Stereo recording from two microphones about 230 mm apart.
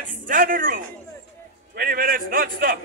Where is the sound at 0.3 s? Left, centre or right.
Right.